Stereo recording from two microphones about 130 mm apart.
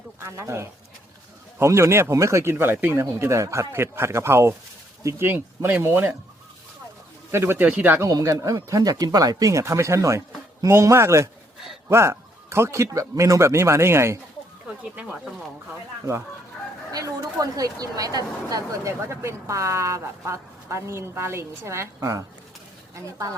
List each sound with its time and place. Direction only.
0.2 s speech: 20° right (ahead or behind)
7.3 s speech: 20° right (ahead or behind)
8.0 s speech: 25° right (ahead or behind)
14.8 s speech: 5° right (ahead or behind)
16.9 s speech: 25° right (ahead or behind)